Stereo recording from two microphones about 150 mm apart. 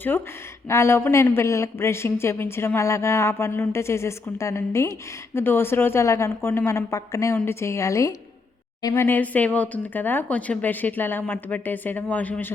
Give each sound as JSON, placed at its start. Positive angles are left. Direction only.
{"t": 0.7, "sound": "a woman's voice", "side_deg": 15}